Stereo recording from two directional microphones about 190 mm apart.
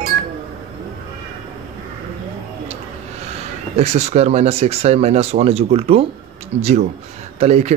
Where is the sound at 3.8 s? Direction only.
35° right (ahead or behind).